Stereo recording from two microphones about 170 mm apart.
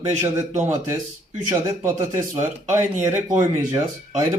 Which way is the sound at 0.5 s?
45° right (ahead or behind).